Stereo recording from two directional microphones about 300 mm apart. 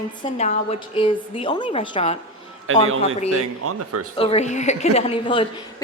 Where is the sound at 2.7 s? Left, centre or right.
Right.